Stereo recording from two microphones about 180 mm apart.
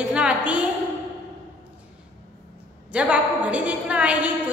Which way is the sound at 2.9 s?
5° right (ahead or behind).